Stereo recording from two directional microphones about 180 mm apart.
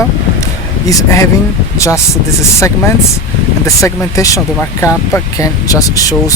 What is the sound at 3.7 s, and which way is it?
Speech, 15° left (ahead or behind).